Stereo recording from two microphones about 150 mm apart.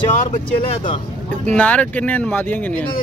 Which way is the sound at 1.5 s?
10° left (ahead or behind).